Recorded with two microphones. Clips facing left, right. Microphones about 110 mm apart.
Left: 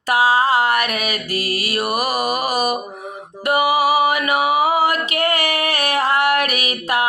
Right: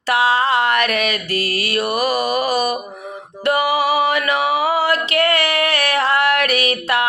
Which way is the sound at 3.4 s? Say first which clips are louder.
Left 1 dB; 10° left (ahead or behind).